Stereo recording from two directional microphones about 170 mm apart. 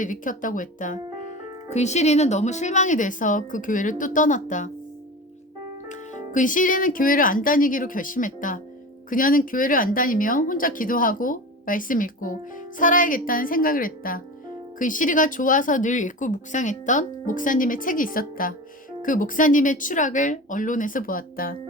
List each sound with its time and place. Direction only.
0.0 s speech: 50° left (ahead or behind)
5.9 s a woman's voice: 45° left (ahead or behind)